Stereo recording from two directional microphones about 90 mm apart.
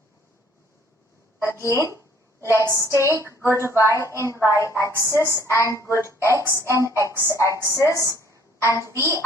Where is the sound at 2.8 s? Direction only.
35° left (ahead or behind).